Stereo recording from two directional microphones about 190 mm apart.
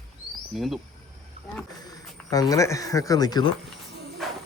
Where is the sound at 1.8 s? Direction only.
20° left (ahead or behind).